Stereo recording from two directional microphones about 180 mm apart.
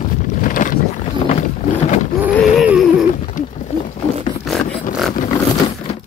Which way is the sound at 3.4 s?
45° left (ahead or behind).